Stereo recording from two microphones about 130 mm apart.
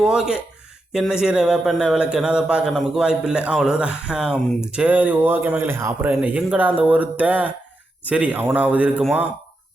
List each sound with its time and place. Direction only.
0.0 s a man's voice: 5° right (ahead or behind)